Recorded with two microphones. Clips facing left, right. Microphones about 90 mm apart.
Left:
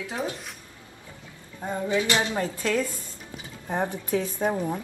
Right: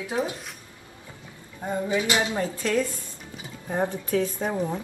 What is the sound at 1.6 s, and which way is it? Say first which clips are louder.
Speech: even; 15° right (ahead or behind).